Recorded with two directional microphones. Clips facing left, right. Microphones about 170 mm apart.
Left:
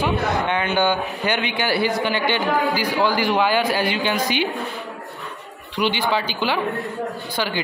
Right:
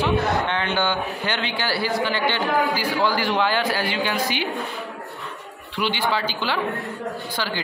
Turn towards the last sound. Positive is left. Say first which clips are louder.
# left 3 dB
turn(degrees=15)  # may be behind; listen again after turning